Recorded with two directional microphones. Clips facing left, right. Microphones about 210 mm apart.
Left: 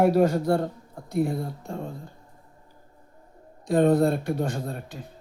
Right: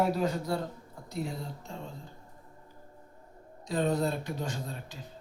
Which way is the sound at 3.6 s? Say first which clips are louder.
Left 9 dB; 55° left (ahead or behind).